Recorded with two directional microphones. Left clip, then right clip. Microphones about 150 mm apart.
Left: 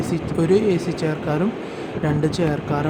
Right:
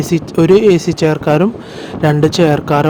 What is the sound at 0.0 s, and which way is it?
Speech, 50° right (ahead or behind).